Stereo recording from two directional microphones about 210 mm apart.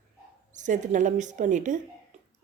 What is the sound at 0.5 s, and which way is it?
A woman's voice, 35° right (ahead or behind).